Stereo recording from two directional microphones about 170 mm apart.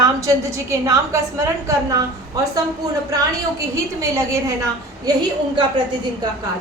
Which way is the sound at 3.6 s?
20° right (ahead or behind).